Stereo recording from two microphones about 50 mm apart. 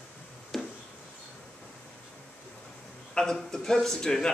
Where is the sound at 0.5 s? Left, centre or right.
Centre.